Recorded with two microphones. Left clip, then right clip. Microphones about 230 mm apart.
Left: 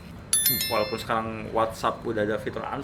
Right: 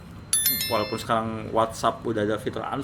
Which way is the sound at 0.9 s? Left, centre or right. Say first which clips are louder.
Right 2 dB; right.